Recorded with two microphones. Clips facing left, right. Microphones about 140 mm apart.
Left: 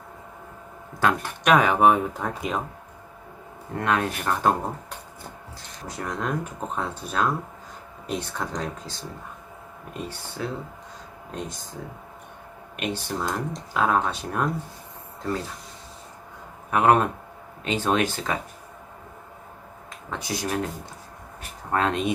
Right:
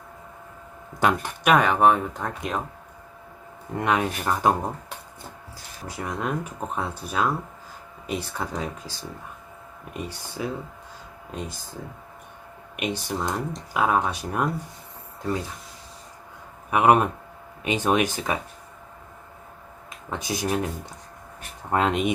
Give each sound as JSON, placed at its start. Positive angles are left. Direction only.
{"t": 0.9, "sound": "speech", "side_deg": -15}
{"t": 1.5, "sound": "speech", "side_deg": 0}
{"t": 3.8, "sound": "speech", "side_deg": -15}
{"t": 6.0, "sound": "speech", "side_deg": -5}
{"t": 12.7, "sound": "speech", "side_deg": -10}
{"t": 16.7, "sound": "speech", "side_deg": -10}
{"t": 20.1, "sound": "speech", "side_deg": -20}
{"t": 21.7, "sound": "speech", "side_deg": -15}